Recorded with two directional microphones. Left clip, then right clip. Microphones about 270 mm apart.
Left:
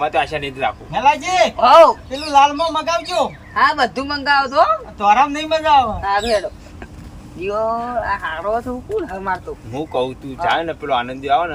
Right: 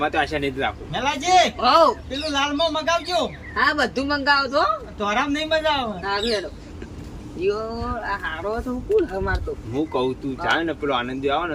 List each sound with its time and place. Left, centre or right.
0.0 s speech: centre
7.4 s speech: centre